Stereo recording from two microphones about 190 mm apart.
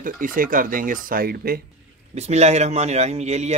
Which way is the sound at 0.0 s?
45° right (ahead or behind).